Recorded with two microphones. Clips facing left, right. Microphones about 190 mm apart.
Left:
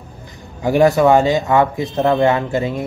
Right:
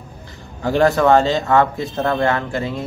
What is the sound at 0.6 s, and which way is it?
Speech, 15° left (ahead or behind).